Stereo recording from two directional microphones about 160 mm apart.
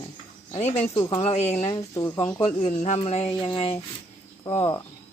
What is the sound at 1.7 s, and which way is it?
Speech, 20° left (ahead or behind).